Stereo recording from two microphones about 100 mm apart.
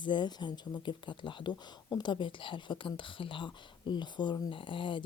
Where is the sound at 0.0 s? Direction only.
50° left (ahead or behind).